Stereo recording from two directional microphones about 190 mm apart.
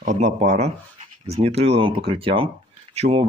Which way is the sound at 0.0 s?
40° right (ahead or behind).